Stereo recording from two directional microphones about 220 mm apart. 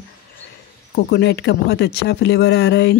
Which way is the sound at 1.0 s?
50° left (ahead or behind).